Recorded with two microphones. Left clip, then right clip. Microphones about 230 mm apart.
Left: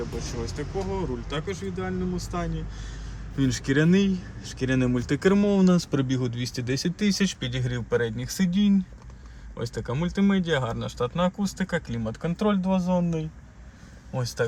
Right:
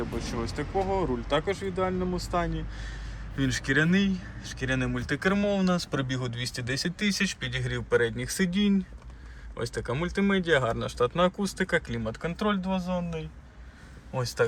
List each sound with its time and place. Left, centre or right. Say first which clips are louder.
0.2 s speech: even; centre
3.3 s speech: left 1 dB; left
14.1 s speech: right 1 dB; left